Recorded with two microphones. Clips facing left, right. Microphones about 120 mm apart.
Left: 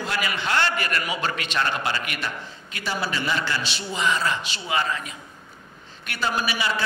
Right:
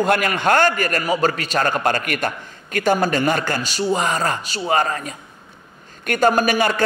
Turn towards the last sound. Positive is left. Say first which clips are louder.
# right 8 dB
turn(degrees=-50)  # may be behind; listen again after turning